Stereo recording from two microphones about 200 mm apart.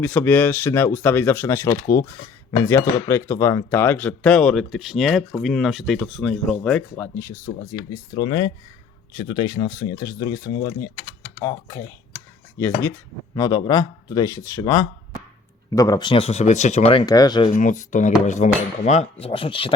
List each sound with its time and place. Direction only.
0.0 s speech: 5° left (ahead or behind); by 17.0 s 35° left (ahead or behind)
17.1 s speech: 20° left (ahead or behind)
17.5 s dishes: 40° left (ahead or behind)
19.2 s speech: 25° left (ahead or behind)